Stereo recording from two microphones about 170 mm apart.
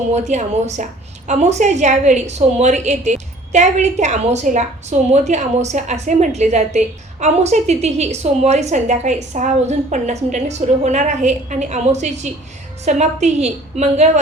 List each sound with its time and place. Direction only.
0.1 s a woman's voice: 40° right (ahead or behind)